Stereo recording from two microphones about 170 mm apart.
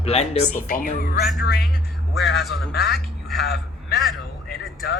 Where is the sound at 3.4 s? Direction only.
70° left (ahead or behind).